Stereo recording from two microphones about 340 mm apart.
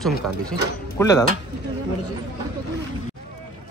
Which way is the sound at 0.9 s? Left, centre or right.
Centre.